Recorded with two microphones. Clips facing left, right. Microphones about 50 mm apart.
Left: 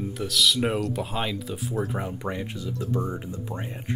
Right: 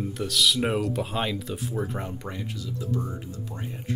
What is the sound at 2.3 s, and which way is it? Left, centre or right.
Speech, left.